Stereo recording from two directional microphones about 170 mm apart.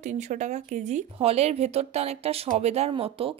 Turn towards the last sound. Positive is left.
turn(degrees=-35)  # may be behind; listen again after turning